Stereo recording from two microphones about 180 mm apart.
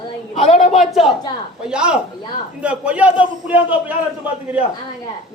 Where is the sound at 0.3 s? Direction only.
35° left (ahead or behind).